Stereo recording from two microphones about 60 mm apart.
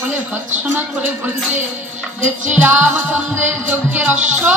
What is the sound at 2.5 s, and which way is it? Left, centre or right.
Speech, right.